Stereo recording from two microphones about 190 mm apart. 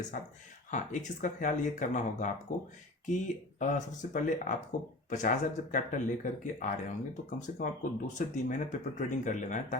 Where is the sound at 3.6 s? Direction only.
40° left (ahead or behind).